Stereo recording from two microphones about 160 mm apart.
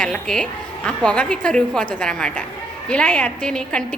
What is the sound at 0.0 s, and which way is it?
A woman's voice, 5° left (ahead or behind).